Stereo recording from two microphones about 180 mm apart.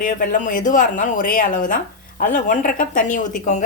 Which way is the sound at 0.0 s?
50° left (ahead or behind).